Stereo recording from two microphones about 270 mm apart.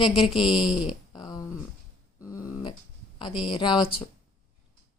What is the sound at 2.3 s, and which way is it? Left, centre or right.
Dog, centre.